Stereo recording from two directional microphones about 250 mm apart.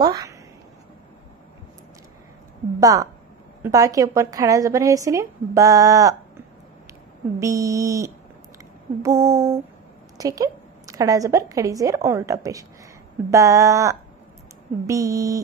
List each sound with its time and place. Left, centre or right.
0.0 s a woman's voice: centre
2.8 s a woman's voice: centre